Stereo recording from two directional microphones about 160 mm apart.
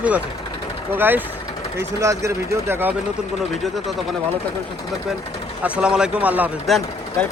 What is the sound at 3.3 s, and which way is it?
Speech, centre (ahead or behind).